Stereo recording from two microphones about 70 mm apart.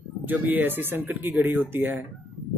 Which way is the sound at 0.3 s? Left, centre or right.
Right.